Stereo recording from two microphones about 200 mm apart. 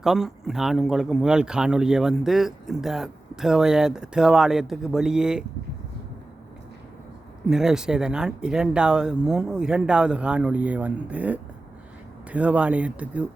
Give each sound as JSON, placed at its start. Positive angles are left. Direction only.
{"t": 0.0, "sound": "speech", "side_deg": 0}
{"t": 7.4, "sound": "speech", "side_deg": -5}